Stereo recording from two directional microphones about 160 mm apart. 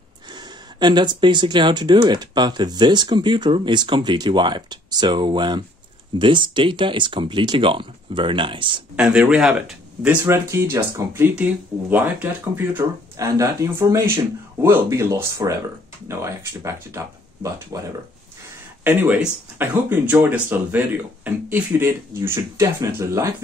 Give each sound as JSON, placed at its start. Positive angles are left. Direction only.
{"t": 0.3, "sound": "speech", "side_deg": -30}
{"t": 8.9, "sound": "speech", "side_deg": -5}
{"t": 10.2, "sound": "speech", "side_deg": -15}
{"t": 18.9, "sound": "speech", "side_deg": -10}